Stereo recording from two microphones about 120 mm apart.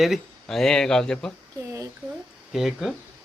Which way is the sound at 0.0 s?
Centre (ahead or behind).